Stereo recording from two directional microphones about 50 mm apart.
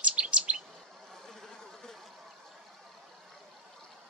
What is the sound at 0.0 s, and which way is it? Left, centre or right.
Chirp, right.